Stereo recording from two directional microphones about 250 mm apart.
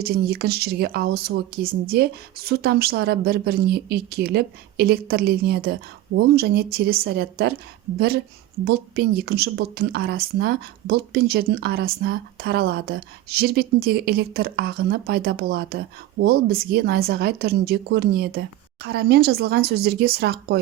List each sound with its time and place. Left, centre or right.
0.0 s a woman's voice: right